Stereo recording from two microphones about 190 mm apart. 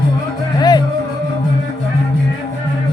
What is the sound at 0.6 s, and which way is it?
Music, 20° left (ahead or behind).